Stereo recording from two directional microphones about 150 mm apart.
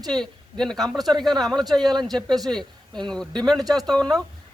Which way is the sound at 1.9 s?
30° right (ahead or behind).